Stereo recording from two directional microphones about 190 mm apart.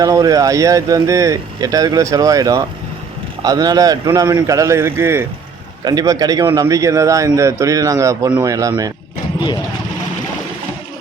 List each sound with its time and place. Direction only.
0.0 s speech: 20° right (ahead or behind)